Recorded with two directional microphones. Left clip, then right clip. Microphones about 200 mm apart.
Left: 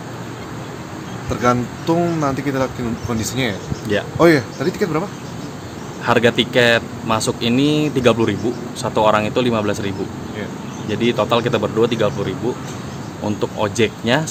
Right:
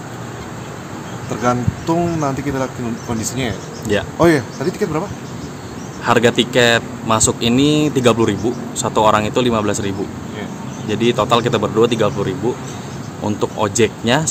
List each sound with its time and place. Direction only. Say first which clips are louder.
1.3 s speech: left 1 dB; 10° left (ahead or behind)
6.1 s speech: right 1 dB; 15° right (ahead or behind)